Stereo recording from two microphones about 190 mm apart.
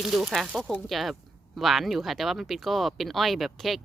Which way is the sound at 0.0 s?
Centre (ahead or behind).